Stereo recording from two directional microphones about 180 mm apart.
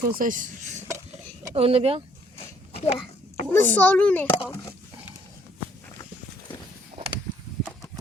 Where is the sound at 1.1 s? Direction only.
35° right (ahead or behind).